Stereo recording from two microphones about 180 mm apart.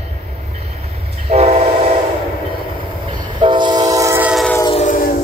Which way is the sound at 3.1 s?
25° right (ahead or behind).